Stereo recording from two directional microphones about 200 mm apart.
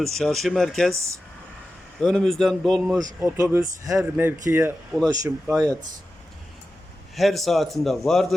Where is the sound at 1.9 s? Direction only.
Centre (ahead or behind).